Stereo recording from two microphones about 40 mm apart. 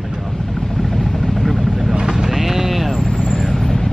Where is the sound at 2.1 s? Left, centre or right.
Centre.